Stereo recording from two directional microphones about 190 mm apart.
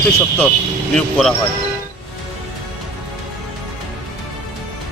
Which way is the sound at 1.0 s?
5° left (ahead or behind).